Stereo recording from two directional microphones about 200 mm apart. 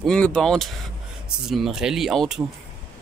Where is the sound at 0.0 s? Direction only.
5° left (ahead or behind).